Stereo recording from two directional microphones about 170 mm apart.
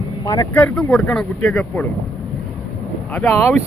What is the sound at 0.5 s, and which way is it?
Speech, 5° left (ahead or behind).